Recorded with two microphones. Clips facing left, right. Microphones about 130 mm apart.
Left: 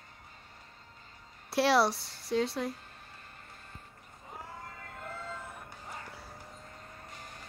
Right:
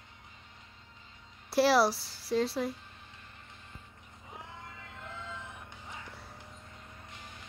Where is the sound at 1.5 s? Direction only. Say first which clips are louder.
Right 1 dB; centre (ahead or behind).